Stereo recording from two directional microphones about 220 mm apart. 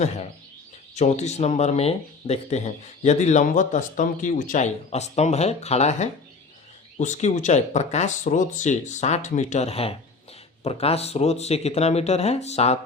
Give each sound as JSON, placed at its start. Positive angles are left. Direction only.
{"t": 0.9, "sound": "speech", "side_deg": 30}